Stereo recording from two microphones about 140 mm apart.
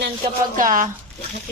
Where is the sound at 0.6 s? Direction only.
70° right (ahead or behind).